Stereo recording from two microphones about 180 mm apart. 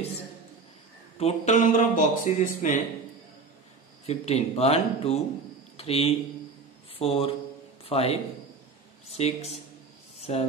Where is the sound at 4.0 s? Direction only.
35° left (ahead or behind).